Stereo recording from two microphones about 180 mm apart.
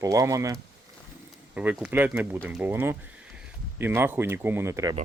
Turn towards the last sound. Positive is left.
turn(degrees=-15)  # may be behind; listen again after turning